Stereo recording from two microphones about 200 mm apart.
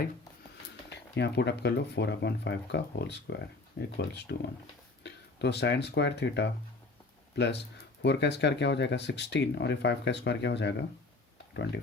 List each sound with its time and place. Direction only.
0.9 s speech: 60° left (ahead or behind)